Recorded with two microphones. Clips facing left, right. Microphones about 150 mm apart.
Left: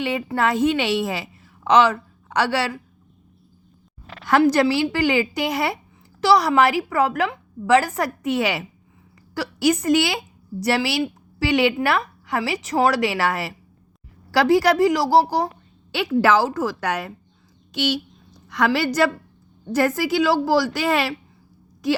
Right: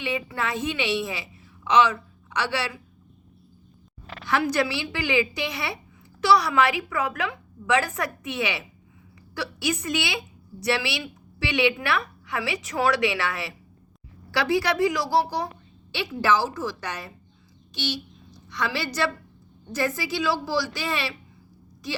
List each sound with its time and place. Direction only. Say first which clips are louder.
0.0 s a woman's voice: left 7 dB; 45° left (ahead or behind)
4.3 s a woman's voice: left 7 dB; 45° left (ahead or behind)
16.0 s a woman's voice: left 6 dB; 60° left (ahead or behind)
19.7 s a woman's voice: left 7 dB; 50° left (ahead or behind)